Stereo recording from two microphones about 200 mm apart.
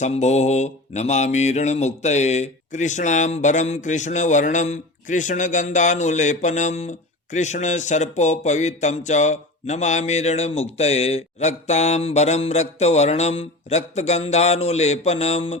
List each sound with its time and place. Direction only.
0.0 s speech: 35° left (ahead or behind)